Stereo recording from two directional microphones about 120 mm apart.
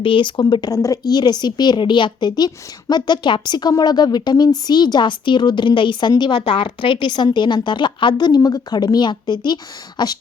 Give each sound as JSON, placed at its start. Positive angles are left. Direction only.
{"t": 0.0, "sound": "a woman's voice", "side_deg": 45}